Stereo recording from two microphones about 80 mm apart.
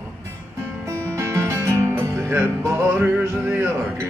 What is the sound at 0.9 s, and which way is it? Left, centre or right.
Music, right.